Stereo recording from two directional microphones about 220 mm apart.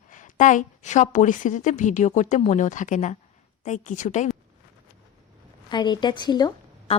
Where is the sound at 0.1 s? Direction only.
35° left (ahead or behind).